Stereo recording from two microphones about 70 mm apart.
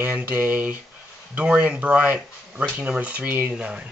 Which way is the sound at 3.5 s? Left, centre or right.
Centre.